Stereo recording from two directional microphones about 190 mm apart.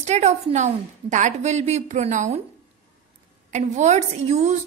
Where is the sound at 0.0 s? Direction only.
35° right (ahead or behind).